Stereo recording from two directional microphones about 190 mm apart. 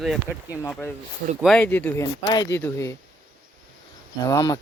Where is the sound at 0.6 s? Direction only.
10° left (ahead or behind).